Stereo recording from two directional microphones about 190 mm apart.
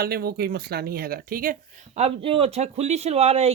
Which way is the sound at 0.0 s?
55° right (ahead or behind).